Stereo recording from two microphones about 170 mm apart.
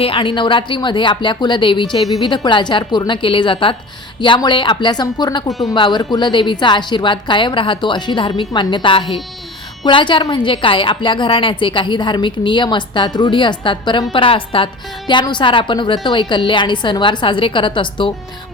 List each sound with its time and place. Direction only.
0.0 s a woman's voice: 30° left (ahead or behind)
5.5 s speech: centre (ahead or behind)
5.7 s a woman's voice: 25° left (ahead or behind)